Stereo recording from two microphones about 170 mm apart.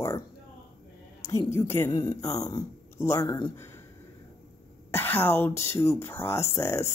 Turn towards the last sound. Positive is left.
turn(degrees=15)  # may be behind; listen again after turning